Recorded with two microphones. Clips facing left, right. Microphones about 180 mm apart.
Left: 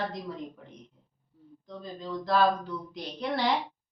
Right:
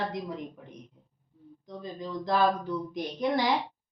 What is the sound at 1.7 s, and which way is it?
Speech, 15° right (ahead or behind).